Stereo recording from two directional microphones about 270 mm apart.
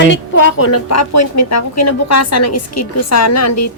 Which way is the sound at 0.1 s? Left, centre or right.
Left.